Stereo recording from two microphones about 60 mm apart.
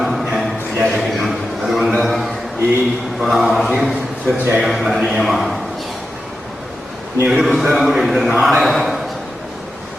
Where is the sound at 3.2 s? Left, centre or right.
Centre.